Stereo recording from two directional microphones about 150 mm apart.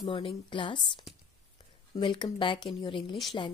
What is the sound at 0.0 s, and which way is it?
Speech, 35° left (ahead or behind).